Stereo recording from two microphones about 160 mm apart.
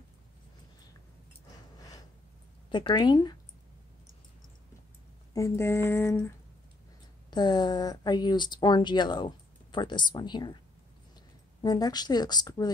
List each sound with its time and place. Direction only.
2.7 s speech: 30° left (ahead or behind)
5.3 s a sound: 15° left (ahead or behind)
7.2 s speech: 25° left (ahead or behind)
11.6 s speech: 25° left (ahead or behind)